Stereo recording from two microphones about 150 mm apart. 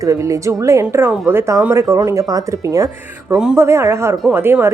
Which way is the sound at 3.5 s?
20° right (ahead or behind).